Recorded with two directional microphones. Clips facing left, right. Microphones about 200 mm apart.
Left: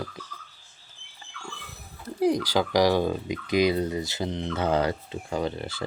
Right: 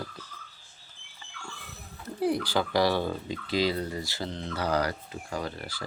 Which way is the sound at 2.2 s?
15° left (ahead or behind).